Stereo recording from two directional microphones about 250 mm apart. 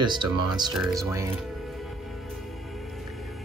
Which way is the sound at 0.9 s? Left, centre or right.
Centre.